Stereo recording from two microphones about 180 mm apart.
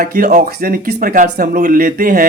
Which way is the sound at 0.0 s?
50° right (ahead or behind).